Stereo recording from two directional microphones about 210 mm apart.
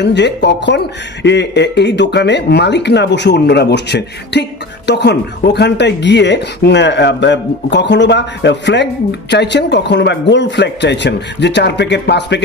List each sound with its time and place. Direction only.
0.0 s speech: 55° left (ahead or behind)